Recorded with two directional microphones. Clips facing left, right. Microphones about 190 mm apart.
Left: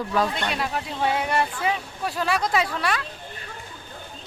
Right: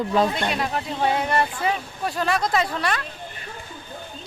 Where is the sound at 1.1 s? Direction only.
10° left (ahead or behind).